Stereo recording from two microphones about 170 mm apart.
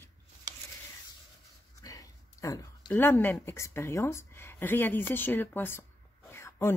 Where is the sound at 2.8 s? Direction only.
10° left (ahead or behind).